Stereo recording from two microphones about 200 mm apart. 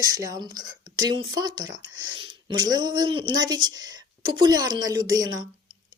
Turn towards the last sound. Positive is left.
turn(degrees=-20)  # may be behind; listen again after turning